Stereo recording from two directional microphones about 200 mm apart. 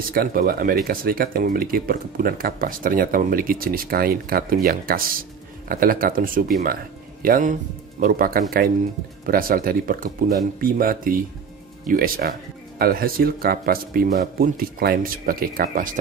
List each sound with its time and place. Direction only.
0.1 s speech: 50° right (ahead or behind)